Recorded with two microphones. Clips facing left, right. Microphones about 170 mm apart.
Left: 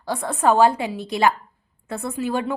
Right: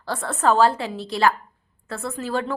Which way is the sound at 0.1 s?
15° left (ahead or behind).